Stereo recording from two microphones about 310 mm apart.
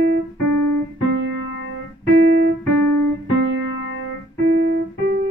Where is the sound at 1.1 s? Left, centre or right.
Right.